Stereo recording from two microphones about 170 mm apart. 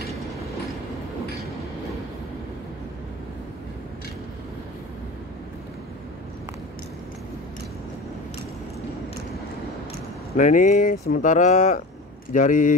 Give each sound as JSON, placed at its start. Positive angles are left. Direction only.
{"t": 10.3, "sound": "speech", "side_deg": 45}